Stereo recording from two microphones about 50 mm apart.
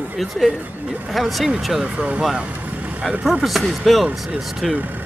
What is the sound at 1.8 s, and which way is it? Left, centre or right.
Speech, right.